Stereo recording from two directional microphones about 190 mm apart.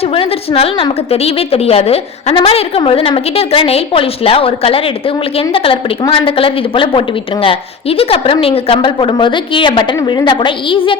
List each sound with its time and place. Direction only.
0.0 s a woman's voice: 30° left (ahead or behind)